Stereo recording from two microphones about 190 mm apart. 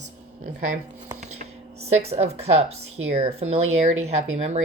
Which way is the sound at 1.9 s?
35° right (ahead or behind).